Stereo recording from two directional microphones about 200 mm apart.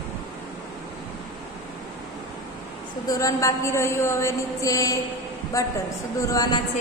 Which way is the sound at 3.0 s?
15° left (ahead or behind).